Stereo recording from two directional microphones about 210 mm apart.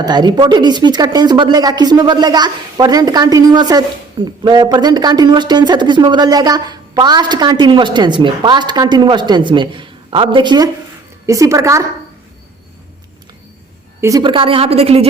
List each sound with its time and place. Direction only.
0.0 s a woman's voice: 20° right (ahead or behind)
14.0 s speech: 15° right (ahead or behind)